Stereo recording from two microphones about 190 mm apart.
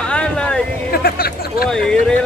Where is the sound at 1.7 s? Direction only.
5° left (ahead or behind).